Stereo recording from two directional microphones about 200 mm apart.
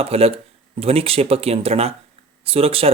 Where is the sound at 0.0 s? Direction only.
30° right (ahead or behind).